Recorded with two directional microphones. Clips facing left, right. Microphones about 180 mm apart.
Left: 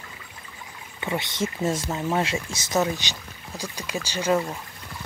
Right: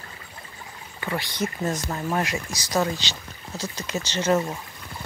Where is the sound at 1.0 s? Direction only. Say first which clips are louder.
Left 1 dB; 25° left (ahead or behind).